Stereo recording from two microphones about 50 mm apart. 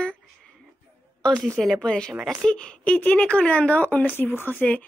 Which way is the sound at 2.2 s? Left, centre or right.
Centre.